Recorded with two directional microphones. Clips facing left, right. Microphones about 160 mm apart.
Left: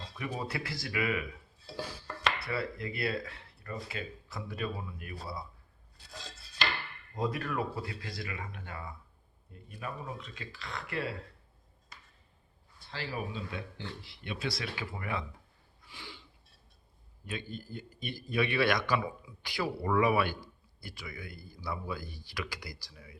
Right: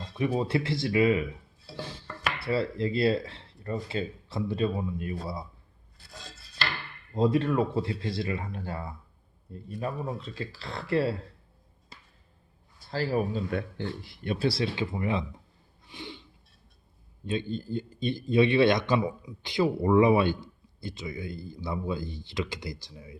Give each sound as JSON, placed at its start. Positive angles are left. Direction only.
{"t": 0.2, "sound": "speech", "side_deg": -25}
{"t": 1.8, "sound": "music", "side_deg": -25}
{"t": 2.4, "sound": "speech", "side_deg": -25}
{"t": 7.1, "sound": "speech", "side_deg": -25}
{"t": 12.8, "sound": "speech", "side_deg": -40}
{"t": 14.3, "sound": "speech", "side_deg": -30}
{"t": 15.8, "sound": "a sound", "side_deg": -20}
{"t": 17.2, "sound": "speech", "side_deg": -25}